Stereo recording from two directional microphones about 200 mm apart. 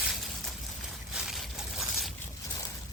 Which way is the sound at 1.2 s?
Centre (ahead or behind).